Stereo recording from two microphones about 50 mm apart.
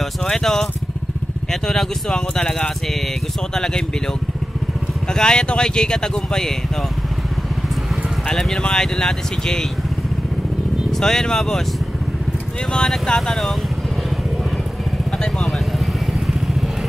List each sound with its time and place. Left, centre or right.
0.2 s speech: centre
5.0 s speech: centre
8.3 s speech: centre
10.9 s speech: centre
12.7 s speech: centre
15.8 s vehicle: centre